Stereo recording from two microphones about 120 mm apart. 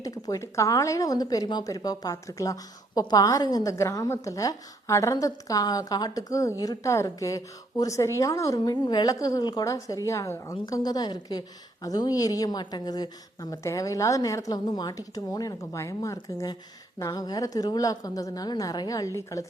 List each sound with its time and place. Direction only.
0.0 s a woman's voice: 25° left (ahead or behind)